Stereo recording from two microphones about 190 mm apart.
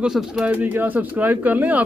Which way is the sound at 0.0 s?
5° right (ahead or behind).